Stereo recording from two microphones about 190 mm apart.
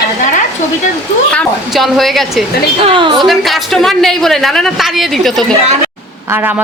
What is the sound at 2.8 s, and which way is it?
Speech, 25° right (ahead or behind).